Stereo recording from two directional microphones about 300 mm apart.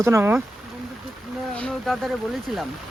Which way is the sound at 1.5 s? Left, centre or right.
Centre.